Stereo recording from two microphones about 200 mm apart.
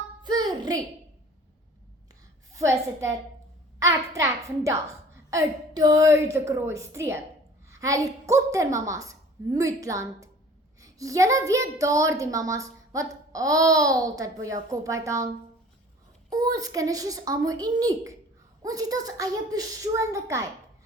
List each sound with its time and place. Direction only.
0.2 s a sound: 20° right (ahead or behind)
2.5 s a woman's voice: 15° right (ahead or behind)
16.3 s a woman's voice: 20° right (ahead or behind)